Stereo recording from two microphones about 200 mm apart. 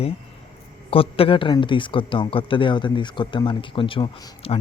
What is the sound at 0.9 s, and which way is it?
Speech, 30° left (ahead or behind).